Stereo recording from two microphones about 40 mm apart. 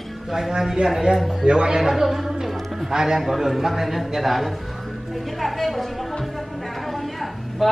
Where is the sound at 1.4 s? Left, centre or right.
Right.